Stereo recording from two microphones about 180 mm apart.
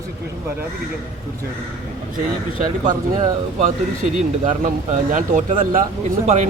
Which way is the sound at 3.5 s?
40° right (ahead or behind).